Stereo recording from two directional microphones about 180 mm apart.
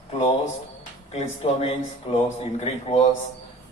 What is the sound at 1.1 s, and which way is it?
Speech, 35° left (ahead or behind).